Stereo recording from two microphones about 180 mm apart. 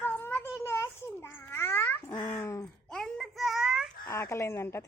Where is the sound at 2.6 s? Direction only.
5° left (ahead or behind).